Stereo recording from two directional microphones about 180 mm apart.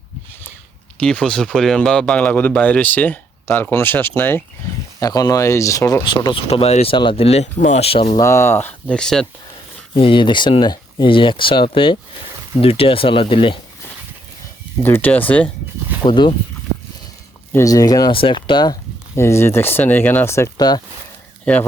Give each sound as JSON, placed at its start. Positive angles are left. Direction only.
{"t": 0.9, "sound": "speech", "side_deg": 5}
{"t": 6.5, "sound": "speech", "side_deg": 35}
{"t": 8.2, "sound": "speech", "side_deg": 15}
{"t": 9.9, "sound": "speech", "side_deg": 30}
{"t": 14.8, "sound": "speech", "side_deg": 10}
{"t": 16.0, "sound": "speech", "side_deg": 25}
{"t": 17.5, "sound": "speech", "side_deg": 20}